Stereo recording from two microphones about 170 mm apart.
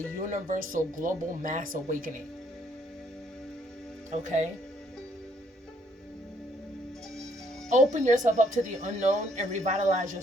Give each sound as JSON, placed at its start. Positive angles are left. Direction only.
{"t": 0.2, "sound": "speech", "side_deg": -50}
{"t": 4.2, "sound": "speech", "side_deg": -45}
{"t": 7.7, "sound": "speech", "side_deg": -45}